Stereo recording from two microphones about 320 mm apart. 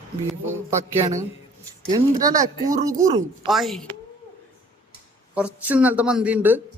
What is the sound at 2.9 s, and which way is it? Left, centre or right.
Speech, right.